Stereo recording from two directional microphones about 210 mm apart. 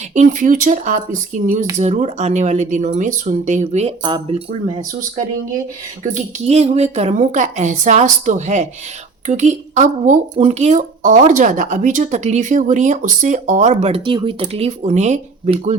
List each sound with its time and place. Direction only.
0.1 s speech: 35° right (ahead or behind)
6.5 s speech: 30° right (ahead or behind)